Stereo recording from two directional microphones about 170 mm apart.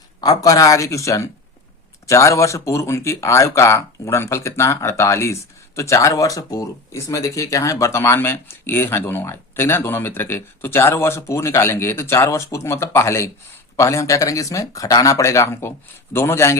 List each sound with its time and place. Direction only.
0.2 s speech: 20° left (ahead or behind)